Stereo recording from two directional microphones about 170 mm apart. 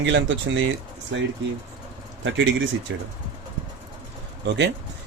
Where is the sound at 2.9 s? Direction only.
90° right.